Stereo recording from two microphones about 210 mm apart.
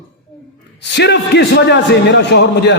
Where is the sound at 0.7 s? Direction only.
55° left (ahead or behind).